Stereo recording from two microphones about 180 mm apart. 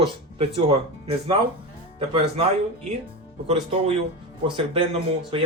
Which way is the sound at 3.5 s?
30° right (ahead or behind).